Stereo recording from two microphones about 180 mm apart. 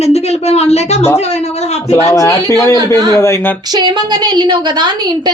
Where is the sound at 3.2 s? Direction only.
15° left (ahead or behind).